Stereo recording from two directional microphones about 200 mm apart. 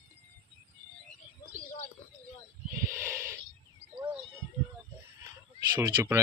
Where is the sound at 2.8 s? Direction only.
15° right (ahead or behind).